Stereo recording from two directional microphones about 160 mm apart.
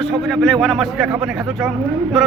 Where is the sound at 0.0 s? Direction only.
Centre (ahead or behind).